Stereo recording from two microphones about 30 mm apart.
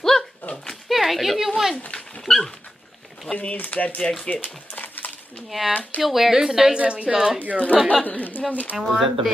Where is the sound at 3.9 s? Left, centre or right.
Left.